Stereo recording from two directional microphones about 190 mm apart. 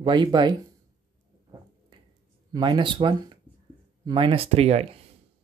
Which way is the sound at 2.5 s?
25° right (ahead or behind).